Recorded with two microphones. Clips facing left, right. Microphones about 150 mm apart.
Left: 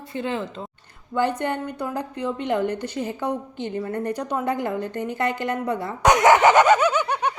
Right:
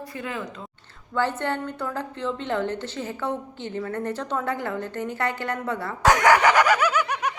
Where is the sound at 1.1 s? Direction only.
15° left (ahead or behind).